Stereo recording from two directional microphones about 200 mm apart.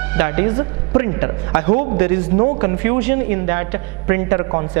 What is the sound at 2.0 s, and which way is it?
Speech, 15° right (ahead or behind).